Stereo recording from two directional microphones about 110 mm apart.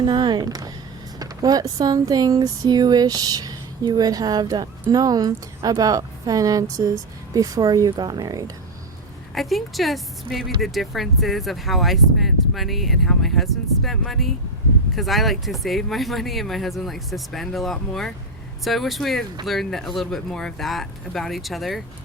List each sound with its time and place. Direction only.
0.0 s a woman's voice: 40° right (ahead or behind)
9.3 s speech: centre (ahead or behind)